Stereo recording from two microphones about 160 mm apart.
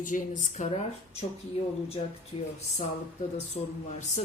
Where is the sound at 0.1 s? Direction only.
50° left (ahead or behind).